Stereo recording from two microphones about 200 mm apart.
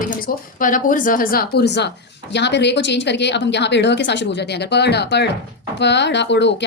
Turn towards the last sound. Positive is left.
turn(degrees=60)  # may be behind; listen again after turning